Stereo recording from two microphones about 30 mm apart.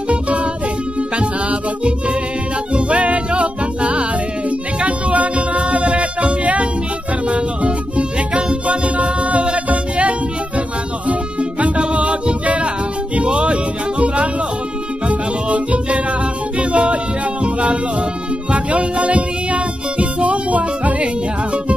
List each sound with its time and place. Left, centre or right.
1.1 s music: right
2.7 s music: right
11.6 s music: right
18.5 s music: right